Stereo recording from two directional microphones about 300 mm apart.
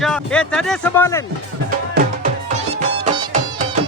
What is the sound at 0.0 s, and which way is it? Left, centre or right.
Speech, centre.